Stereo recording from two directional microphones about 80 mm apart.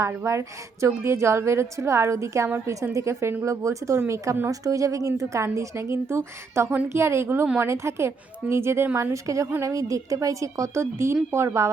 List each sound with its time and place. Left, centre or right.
0.0 s a woman's voice: right